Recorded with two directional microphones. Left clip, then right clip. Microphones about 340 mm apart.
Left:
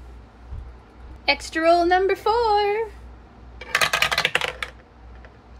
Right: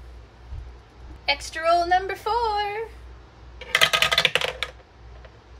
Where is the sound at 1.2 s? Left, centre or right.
Left.